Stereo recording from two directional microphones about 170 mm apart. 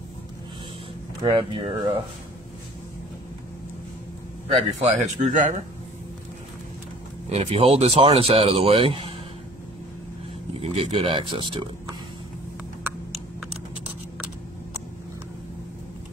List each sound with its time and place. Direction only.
1.2 s speech: 30° right (ahead or behind)
4.7 s speech: 40° right (ahead or behind)
7.2 s speech: 40° right (ahead or behind)
10.5 s speech: 35° right (ahead or behind)